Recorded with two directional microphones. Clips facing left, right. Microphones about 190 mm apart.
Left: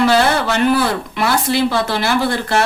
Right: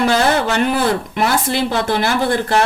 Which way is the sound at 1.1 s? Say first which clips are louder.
Left 1 dB; 50° right (ahead or behind).